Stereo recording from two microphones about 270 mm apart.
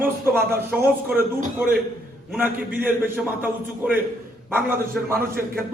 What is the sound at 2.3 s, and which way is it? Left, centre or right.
A man's voice, centre.